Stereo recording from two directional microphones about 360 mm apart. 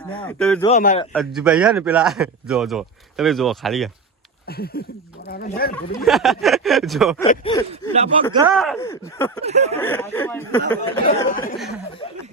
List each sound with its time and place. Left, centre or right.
0.1 s speech: centre
0.6 s a man's voice: centre
1.1 s speech: centre
4.4 s speech: left
6.1 s speech: centre
7.3 s a man's voice: centre
7.7 s speech: centre
9.4 s a sound: centre
9.8 s speech: centre; by 11.5 s left